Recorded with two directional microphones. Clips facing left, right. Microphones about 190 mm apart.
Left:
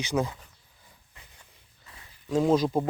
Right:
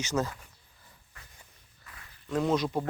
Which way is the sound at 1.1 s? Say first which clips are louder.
Even; 20° left (ahead or behind).